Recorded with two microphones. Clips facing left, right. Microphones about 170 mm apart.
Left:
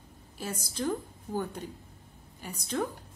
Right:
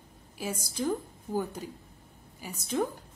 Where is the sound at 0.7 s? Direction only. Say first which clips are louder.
Even; 10° right (ahead or behind).